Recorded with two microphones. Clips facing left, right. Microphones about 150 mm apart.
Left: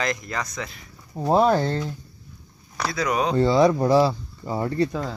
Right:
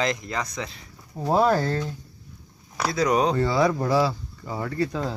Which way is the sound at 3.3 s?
25° left (ahead or behind).